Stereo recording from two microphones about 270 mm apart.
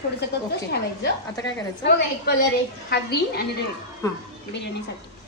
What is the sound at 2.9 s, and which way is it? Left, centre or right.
Speech, left.